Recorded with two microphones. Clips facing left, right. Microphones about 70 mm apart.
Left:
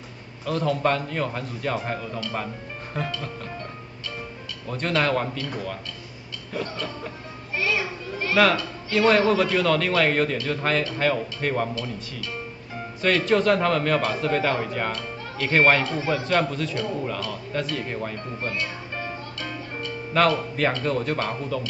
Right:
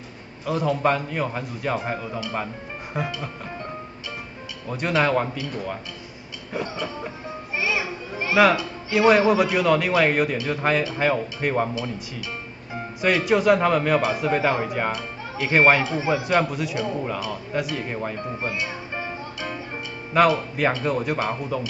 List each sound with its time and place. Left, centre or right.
0.5 s a man's voice: centre
4.6 s a man's voice: centre